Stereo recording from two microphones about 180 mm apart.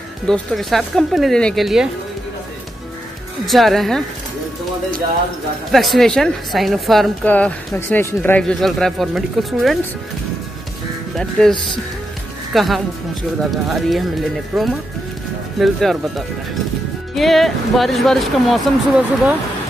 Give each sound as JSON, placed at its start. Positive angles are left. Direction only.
{"t": 0.3, "sound": "speech", "side_deg": 0}
{"t": 3.4, "sound": "speech", "side_deg": 0}
{"t": 5.7, "sound": "speech", "side_deg": 0}
{"t": 11.1, "sound": "speech", "side_deg": 5}
{"t": 12.5, "sound": "speech", "side_deg": 0}